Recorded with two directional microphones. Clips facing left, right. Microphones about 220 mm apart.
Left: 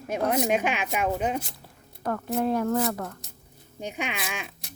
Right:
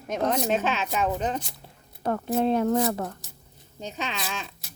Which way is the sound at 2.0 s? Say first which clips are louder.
Right 2 dB; 25° right (ahead or behind).